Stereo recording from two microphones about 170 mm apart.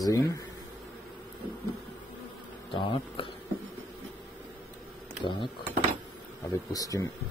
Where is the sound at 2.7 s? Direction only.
30° left (ahead or behind).